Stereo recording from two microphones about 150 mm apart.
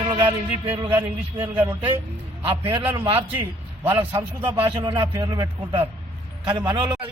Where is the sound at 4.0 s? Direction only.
30° right (ahead or behind).